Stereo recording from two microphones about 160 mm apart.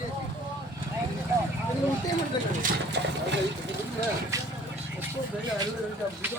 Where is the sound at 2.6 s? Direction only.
90° right.